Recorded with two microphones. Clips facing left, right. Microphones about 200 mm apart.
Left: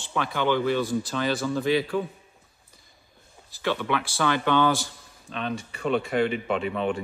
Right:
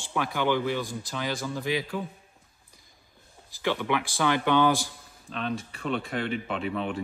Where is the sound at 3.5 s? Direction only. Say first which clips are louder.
Left 1 dB; 15° right (ahead or behind).